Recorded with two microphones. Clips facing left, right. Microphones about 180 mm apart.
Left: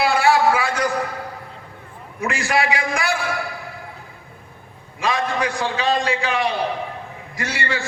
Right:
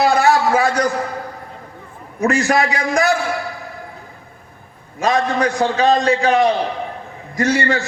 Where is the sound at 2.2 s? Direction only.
40° right (ahead or behind).